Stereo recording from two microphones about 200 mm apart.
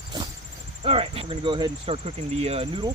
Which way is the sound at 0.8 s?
30° right (ahead or behind).